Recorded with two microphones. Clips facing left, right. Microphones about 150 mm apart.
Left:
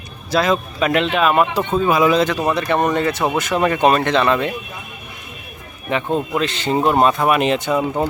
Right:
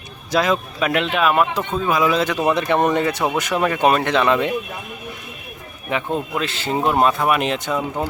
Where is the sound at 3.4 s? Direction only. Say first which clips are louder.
Left 3 dB; 10° right (ahead or behind).